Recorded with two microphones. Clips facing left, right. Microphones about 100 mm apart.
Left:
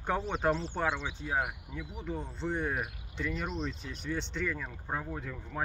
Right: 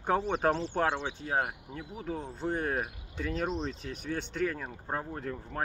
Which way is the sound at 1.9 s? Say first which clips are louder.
Right 2 dB; centre (ahead or behind).